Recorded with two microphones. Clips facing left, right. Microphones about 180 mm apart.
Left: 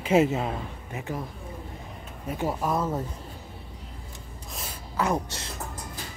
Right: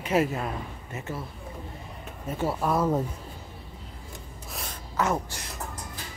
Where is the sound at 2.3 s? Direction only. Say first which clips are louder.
Even; 15° left (ahead or behind).